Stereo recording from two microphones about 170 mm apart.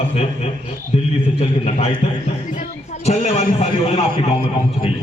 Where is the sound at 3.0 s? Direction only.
40° left (ahead or behind).